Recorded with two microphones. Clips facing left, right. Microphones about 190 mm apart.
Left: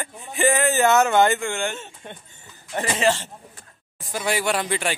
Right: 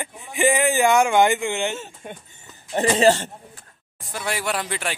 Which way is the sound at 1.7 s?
5° right (ahead or behind).